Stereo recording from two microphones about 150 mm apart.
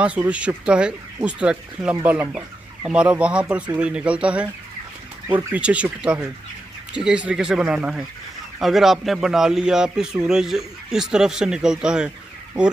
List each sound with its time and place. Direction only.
0.0 s a man's voice: 10° right (ahead or behind)